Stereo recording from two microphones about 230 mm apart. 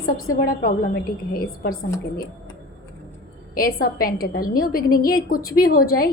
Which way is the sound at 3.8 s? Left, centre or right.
Left.